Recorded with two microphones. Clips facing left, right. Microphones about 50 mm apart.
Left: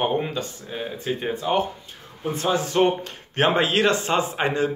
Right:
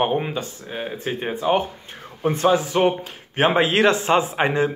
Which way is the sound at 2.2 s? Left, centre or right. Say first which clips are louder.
Right 6 dB; right.